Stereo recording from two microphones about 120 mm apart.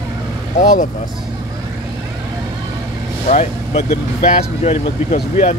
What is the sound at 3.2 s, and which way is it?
Speech, 70° left (ahead or behind).